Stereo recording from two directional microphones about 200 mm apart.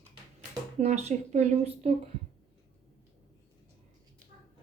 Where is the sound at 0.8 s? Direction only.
35° right (ahead or behind).